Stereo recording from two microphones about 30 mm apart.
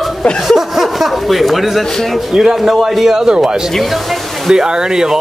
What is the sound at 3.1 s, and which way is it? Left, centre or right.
A man's voice, centre.